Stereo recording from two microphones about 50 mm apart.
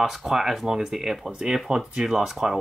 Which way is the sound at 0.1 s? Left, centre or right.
Centre.